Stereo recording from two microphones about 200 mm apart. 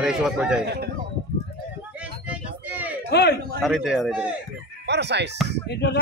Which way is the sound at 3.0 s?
55° left (ahead or behind).